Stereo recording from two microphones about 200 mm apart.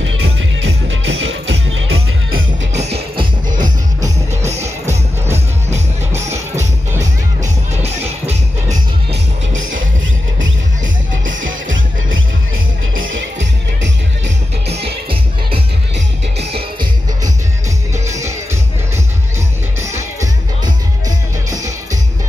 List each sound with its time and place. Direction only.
0.0 s music: 75° right (ahead or behind)
2.7 s music: 30° right (ahead or behind)
7.7 s music: 30° right (ahead or behind)
11.2 s music: 70° right (ahead or behind)
17.9 s music: 15° right (ahead or behind)
19.8 s music: 15° right (ahead or behind)